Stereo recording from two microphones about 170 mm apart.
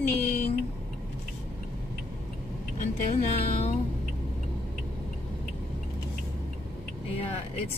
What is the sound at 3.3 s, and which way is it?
Music, 40° left (ahead or behind).